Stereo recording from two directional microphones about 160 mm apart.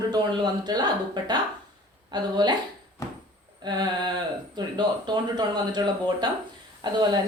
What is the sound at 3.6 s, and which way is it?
A woman's voice, 25° right (ahead or behind).